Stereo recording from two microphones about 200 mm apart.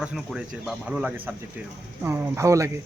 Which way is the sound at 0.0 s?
5° right (ahead or behind).